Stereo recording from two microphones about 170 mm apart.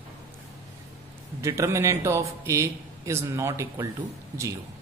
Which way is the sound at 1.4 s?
15° right (ahead or behind).